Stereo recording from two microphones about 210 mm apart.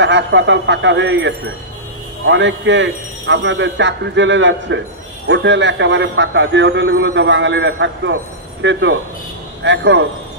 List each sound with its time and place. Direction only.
0.0 s a man's voice: 60° right (ahead or behind)